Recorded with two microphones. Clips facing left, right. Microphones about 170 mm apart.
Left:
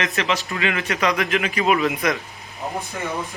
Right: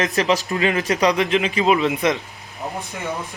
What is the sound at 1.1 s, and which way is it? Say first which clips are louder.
A man's voice: right 3 dB; 25° right (ahead or behind).